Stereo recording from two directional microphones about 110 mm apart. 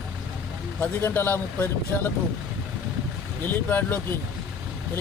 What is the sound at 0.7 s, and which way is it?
Speech, 20° left (ahead or behind).